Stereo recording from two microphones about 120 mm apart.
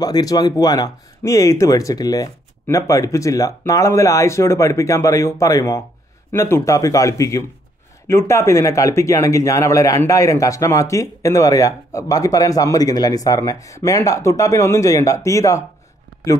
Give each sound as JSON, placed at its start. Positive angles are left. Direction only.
{"t": 0.0, "sound": "speech", "side_deg": 30}